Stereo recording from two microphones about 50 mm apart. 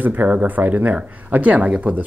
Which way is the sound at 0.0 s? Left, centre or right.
Right.